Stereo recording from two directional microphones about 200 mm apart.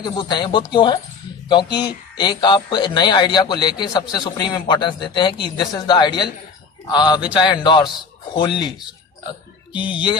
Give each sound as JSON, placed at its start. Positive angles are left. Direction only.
{"t": 0.0, "sound": "speech", "side_deg": 25}
{"t": 9.7, "sound": "speech", "side_deg": 25}